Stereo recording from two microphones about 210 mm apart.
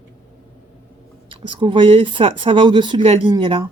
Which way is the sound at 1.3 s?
25° right (ahead or behind).